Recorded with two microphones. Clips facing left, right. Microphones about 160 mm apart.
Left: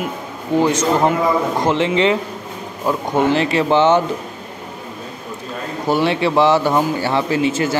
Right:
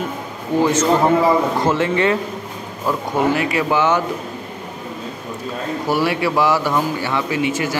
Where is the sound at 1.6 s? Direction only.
20° left (ahead or behind).